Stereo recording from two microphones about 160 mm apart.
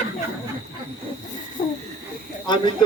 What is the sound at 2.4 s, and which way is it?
Speech, 30° left (ahead or behind).